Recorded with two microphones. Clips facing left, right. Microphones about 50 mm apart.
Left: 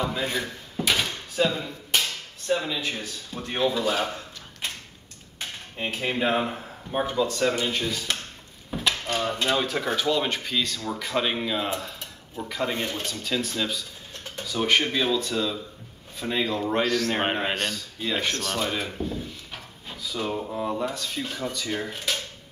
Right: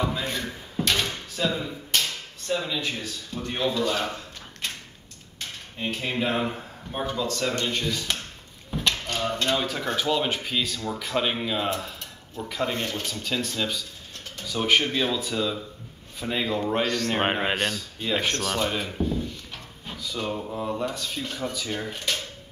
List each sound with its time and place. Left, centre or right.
0.1 s speech: centre
0.8 s door: centre
1.4 s speech: left
1.9 s a sound: centre
3.0 s speech: centre
5.4 s cutlery: centre
6.9 s speech: centre
7.5 s speech: centre
8.7 s a sound: centre
9.7 s speech: centre
10.0 s speech: centre
17.2 s speech: centre